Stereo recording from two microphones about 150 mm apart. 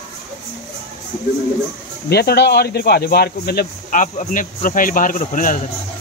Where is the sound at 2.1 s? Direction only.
90° left; by 5.6 s 60° left (ahead or behind).